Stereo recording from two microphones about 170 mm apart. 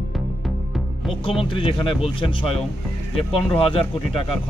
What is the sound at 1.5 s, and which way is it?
Speech, 35° left (ahead or behind).